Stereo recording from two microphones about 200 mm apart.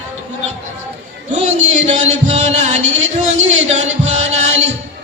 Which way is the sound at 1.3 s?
35° right (ahead or behind).